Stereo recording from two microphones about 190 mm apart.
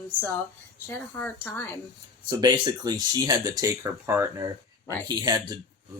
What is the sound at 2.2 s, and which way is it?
Speech, 20° right (ahead or behind).